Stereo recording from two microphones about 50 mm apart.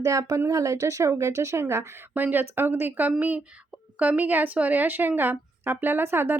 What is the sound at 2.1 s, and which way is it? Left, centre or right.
Speech, right.